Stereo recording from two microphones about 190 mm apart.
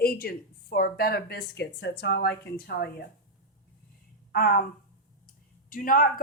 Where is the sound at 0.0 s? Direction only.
50° left (ahead or behind).